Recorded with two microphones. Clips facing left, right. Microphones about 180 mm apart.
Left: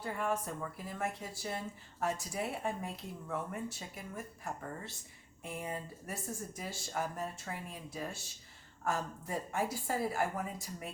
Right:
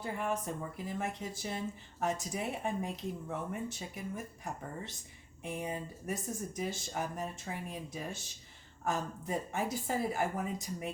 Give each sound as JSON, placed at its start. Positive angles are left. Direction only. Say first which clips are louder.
{"t": 0.0, "sound": "speech", "louder": "even", "side_deg": -20}